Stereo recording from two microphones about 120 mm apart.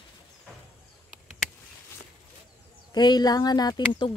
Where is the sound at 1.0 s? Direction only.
Centre (ahead or behind).